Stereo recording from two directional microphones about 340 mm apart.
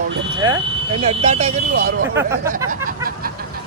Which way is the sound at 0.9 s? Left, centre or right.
Centre.